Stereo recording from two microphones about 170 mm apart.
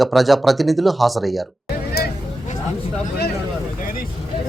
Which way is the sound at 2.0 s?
65° left (ahead or behind).